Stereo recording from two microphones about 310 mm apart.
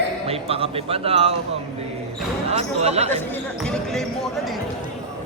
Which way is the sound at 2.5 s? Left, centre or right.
Centre.